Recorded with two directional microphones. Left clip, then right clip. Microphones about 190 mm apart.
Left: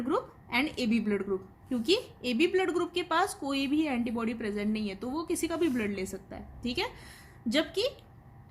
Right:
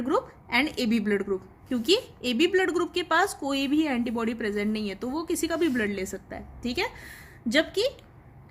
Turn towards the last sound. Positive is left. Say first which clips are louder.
# right 5 dB
turn(degrees=-15)  # may be behind; listen again after turning